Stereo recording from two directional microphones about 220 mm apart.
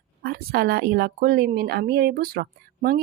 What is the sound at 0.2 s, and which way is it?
A woman's voice, 45° right (ahead or behind).